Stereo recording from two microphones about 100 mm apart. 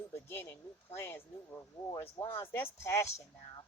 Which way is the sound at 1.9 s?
35° left (ahead or behind).